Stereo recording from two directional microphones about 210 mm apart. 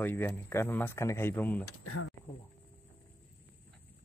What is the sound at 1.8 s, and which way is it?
Speech, 90° left.